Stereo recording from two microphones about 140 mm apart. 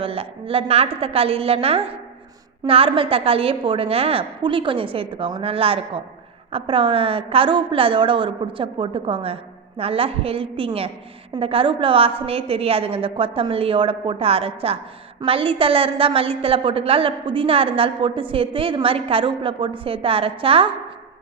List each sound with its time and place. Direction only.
0.0 s a woman's voice: 40° right (ahead or behind)